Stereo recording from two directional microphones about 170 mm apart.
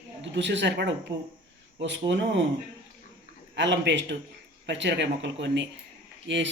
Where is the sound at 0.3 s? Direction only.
90° right.